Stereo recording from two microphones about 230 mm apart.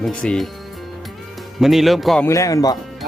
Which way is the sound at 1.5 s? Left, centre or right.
Centre.